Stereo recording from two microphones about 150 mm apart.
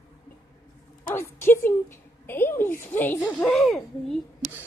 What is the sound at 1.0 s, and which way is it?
A woman's voice, 15° left (ahead or behind).